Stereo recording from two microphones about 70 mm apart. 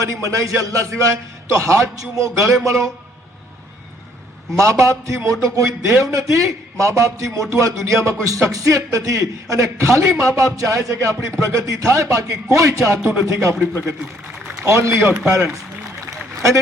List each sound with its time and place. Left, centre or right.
0.0 s a man's voice: right
4.5 s a man's voice: right
13.6 s a man's voice: right
14.6 s a man's voice: right
15.0 s a man's voice: centre
15.3 s a man's voice: right